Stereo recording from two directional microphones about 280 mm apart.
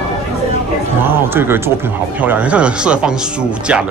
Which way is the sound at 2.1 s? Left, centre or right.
Centre.